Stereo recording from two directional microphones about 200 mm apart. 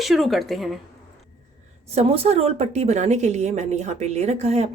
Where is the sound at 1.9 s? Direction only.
30° right (ahead or behind).